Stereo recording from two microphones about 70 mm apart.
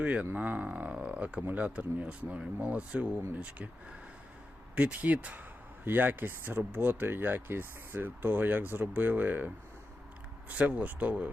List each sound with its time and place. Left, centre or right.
0.0 s speech: centre
4.7 s speech: right
10.5 s speech: right